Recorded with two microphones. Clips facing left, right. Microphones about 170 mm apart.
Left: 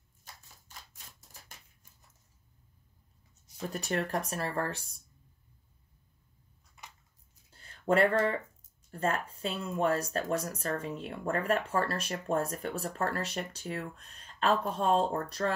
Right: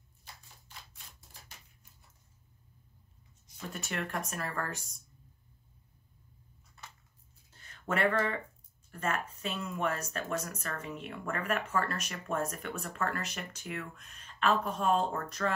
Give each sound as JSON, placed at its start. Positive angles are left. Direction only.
{"t": 0.2, "sound": "typewriter", "side_deg": 45}
{"t": 3.6, "sound": "speech", "side_deg": 35}
{"t": 7.5, "sound": "a sound", "side_deg": 30}
{"t": 8.9, "sound": "speech", "side_deg": 30}